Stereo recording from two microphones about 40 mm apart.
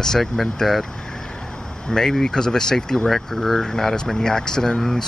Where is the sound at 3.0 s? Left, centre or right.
Centre.